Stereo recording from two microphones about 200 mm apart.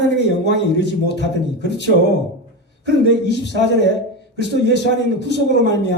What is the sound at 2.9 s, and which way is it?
Speech, 60° left (ahead or behind).